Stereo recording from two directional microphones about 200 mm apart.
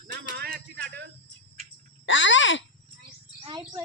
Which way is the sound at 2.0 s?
70° left (ahead or behind).